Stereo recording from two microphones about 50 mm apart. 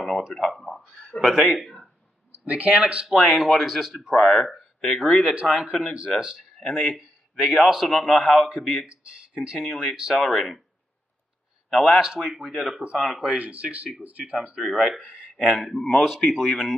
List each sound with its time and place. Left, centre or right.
0.6 s speech: centre
1.2 s a man's voice: centre
2.3 s speech: right; by 4.2 s centre
4.2 s speech: centre
5.2 s speech: right
5.6 s a man's voice: centre
9.0 s speech: centre
10.1 s a man's voice: centre
11.7 s speech: centre
13.3 s speech: right
15.5 s a man's voice: centre